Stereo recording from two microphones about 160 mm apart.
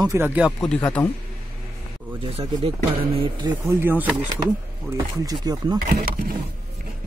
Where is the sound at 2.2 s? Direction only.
35° right (ahead or behind).